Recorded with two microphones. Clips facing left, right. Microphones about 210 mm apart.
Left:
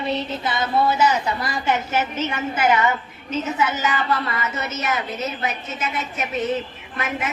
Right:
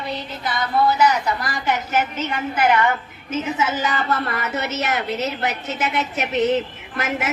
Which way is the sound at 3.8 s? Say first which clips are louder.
Even; 40° right (ahead or behind).